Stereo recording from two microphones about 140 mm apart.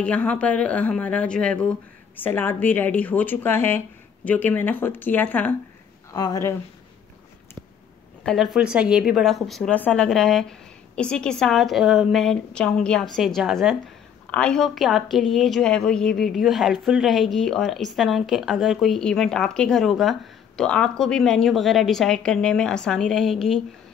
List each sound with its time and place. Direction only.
0.0 s speech: 10° left (ahead or behind)
6.1 s speech: 25° left (ahead or behind)
8.3 s a woman's voice: centre (ahead or behind)